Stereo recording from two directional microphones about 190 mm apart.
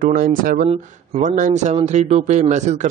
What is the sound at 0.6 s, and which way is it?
A man's voice, 35° right (ahead or behind).